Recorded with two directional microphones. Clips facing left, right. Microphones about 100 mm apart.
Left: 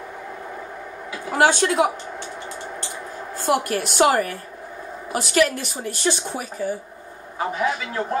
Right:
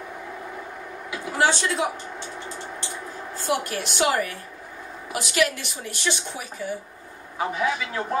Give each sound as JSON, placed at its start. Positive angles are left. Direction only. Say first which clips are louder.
{"t": 1.4, "sound": "a woman's voice", "louder": "left 5 dB", "side_deg": 55}
{"t": 3.3, "sound": "a woman's voice", "louder": "left 5 dB", "side_deg": 50}